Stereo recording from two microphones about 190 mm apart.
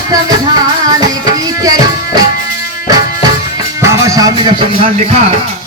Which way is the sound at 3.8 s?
15° right (ahead or behind).